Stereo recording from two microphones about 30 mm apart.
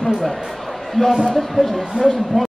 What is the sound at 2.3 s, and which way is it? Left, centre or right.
Speech, left.